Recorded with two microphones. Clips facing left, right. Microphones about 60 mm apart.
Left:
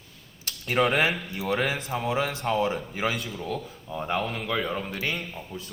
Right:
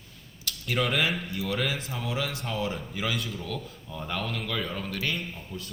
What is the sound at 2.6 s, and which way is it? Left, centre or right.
A man's voice, left.